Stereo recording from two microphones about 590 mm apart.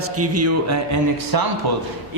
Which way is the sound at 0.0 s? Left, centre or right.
Right.